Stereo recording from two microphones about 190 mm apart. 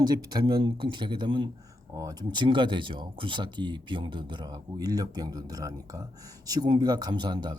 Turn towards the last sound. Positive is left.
turn(degrees=-25)  # may be behind; listen again after turning